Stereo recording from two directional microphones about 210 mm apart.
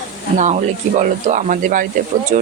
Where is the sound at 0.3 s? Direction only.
35° right (ahead or behind).